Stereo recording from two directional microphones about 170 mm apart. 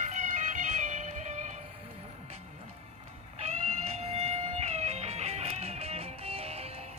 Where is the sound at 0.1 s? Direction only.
45° right (ahead or behind).